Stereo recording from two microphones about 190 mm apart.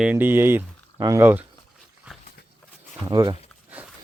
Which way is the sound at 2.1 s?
5° right (ahead or behind).